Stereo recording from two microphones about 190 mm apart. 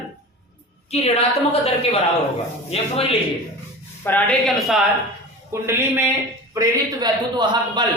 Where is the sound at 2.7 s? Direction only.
30° left (ahead or behind).